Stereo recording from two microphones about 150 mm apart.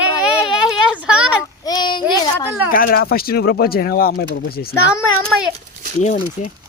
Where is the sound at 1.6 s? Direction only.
30° left (ahead or behind).